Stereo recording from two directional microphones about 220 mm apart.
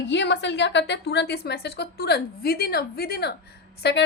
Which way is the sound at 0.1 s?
50° left (ahead or behind).